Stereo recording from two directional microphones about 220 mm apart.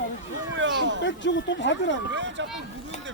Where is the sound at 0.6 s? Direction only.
55° right (ahead or behind).